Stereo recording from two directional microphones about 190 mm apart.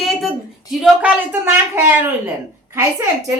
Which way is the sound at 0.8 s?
10° right (ahead or behind).